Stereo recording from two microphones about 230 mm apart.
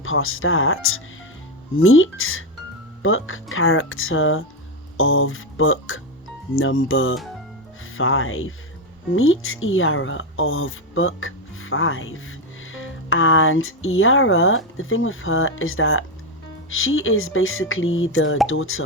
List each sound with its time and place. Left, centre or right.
0.0 s speech: left